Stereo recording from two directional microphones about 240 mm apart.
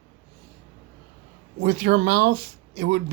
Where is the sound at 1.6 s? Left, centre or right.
Right.